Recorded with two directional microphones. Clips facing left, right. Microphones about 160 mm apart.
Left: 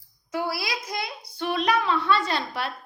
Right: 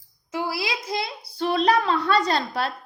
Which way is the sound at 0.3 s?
25° right (ahead or behind).